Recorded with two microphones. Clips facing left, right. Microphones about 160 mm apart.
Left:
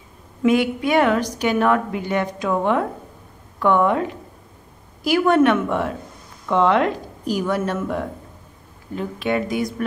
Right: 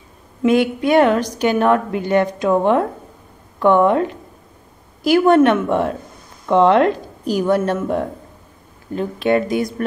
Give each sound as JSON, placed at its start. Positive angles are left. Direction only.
{"t": 0.4, "sound": "a woman's voice", "side_deg": -25}
{"t": 5.0, "sound": "a woman's voice", "side_deg": -30}